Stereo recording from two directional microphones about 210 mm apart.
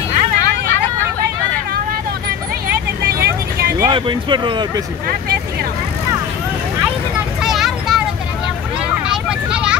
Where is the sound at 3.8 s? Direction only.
20° right (ahead or behind).